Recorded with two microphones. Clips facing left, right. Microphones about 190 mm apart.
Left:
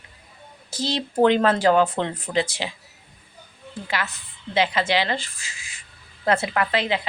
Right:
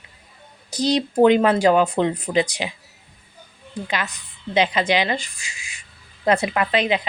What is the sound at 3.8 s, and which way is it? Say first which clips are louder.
A woman's voice: right 1 dB; 15° right (ahead or behind).